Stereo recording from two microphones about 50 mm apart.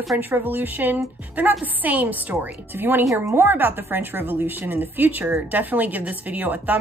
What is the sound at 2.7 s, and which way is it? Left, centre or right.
A woman's voice, right.